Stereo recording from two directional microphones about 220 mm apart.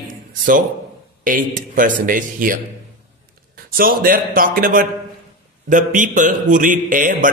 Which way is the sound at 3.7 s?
40° right (ahead or behind).